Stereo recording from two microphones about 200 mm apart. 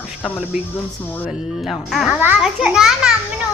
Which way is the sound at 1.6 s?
Centre (ahead or behind).